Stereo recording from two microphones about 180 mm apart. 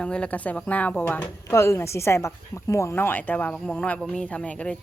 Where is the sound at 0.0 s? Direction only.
5° left (ahead or behind).